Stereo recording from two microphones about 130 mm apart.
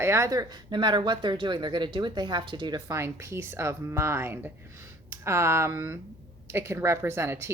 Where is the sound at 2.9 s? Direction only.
20° right (ahead or behind).